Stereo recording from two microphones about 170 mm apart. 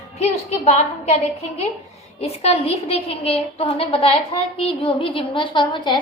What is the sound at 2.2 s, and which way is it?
A woman's voice, 35° left (ahead or behind).